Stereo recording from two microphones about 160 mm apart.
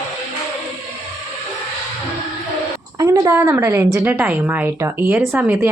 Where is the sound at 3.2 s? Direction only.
20° right (ahead or behind).